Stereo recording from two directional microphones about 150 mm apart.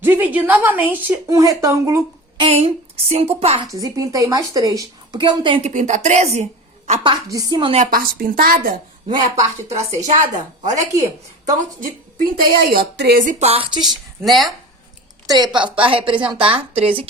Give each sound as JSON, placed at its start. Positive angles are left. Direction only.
{"t": 0.0, "sound": "a woman's voice", "side_deg": -15}
{"t": 2.4, "sound": "a woman's voice", "side_deg": -40}
{"t": 3.7, "sound": "a woman's voice", "side_deg": -20}
{"t": 5.7, "sound": "a woman's voice", "side_deg": -50}
{"t": 7.0, "sound": "a woman's voice", "side_deg": -25}
{"t": 7.9, "sound": "a woman's voice", "side_deg": -75}
{"t": 10.6, "sound": "a woman's voice", "side_deg": -50}
{"t": 10.9, "sound": "a woman's voice", "side_deg": -20}
{"t": 11.8, "sound": "a woman's voice", "side_deg": -70}
{"t": 13.4, "sound": "a woman's voice", "side_deg": -40}
{"t": 14.3, "sound": "speech", "side_deg": 0}
{"t": 15.3, "sound": "a woman's voice", "side_deg": -30}